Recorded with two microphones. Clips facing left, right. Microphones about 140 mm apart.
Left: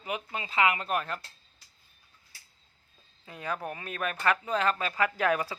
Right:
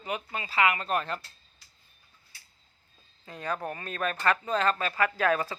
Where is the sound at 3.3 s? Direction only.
10° left (ahead or behind).